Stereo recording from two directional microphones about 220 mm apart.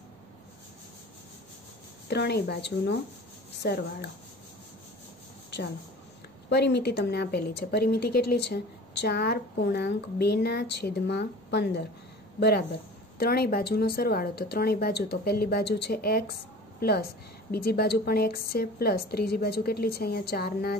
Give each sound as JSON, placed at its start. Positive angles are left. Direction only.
{"t": 2.0, "sound": "a woman's voice", "side_deg": 50}
{"t": 6.5, "sound": "a woman's voice", "side_deg": 50}